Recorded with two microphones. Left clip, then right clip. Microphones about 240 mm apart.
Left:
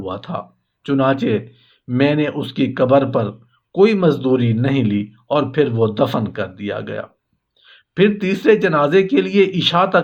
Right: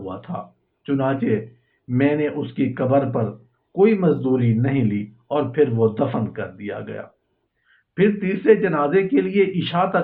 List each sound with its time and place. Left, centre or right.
0.0 s speech: left